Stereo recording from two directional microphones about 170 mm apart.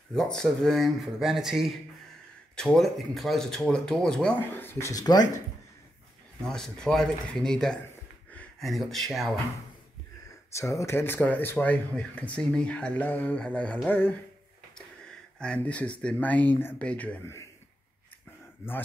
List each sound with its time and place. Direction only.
0.1 s speech: 5° left (ahead or behind); by 5.3 s 25° left (ahead or behind)
6.4 s speech: 5° left (ahead or behind)
10.5 s speech: 15° left (ahead or behind)
18.6 s speech: 15° left (ahead or behind)